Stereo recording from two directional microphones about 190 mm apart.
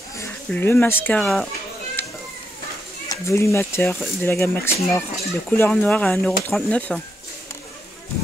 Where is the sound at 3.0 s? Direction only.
15° left (ahead or behind).